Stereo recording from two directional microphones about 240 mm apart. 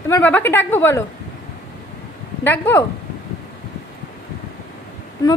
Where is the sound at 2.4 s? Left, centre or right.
Centre.